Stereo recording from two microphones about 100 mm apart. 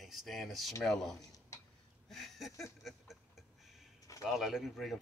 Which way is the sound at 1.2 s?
35° left (ahead or behind).